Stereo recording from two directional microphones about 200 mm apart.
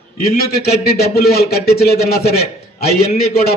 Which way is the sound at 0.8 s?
50° left (ahead or behind).